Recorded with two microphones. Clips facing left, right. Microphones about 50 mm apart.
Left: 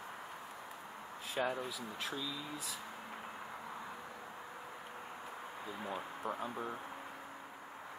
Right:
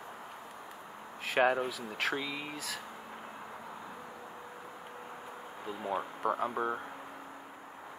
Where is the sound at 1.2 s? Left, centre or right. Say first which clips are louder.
Right 9 dB; right.